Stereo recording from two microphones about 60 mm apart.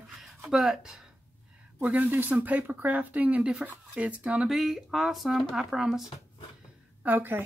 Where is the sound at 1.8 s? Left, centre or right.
Right.